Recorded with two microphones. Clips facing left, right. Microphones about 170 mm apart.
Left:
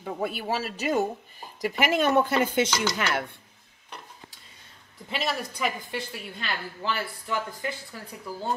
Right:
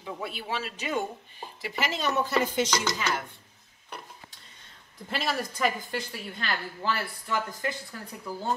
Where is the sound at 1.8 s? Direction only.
55° left (ahead or behind).